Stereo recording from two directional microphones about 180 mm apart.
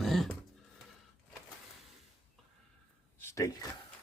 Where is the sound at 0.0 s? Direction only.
Centre (ahead or behind).